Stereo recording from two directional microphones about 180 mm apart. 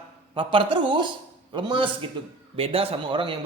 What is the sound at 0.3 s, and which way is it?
A man's voice, 25° right (ahead or behind).